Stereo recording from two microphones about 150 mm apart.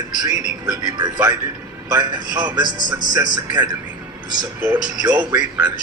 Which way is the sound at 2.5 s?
30° right (ahead or behind).